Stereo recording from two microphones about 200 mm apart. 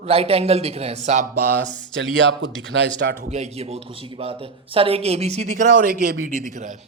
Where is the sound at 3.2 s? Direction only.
35° right (ahead or behind).